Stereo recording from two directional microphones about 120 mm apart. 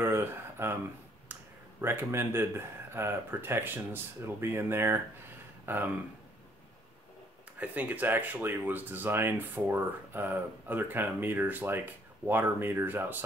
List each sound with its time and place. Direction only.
0.0 s a sound: 20° right (ahead or behind)
1.3 s speech: 20° right (ahead or behind)
7.5 s speech: 15° right (ahead or behind)